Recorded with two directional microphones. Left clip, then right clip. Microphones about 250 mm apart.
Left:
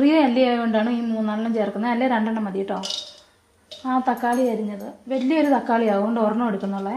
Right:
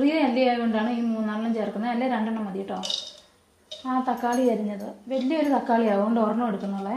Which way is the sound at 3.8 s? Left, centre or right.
Centre.